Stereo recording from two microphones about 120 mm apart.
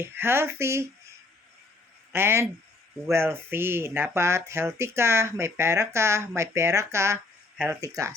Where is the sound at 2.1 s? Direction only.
20° right (ahead or behind).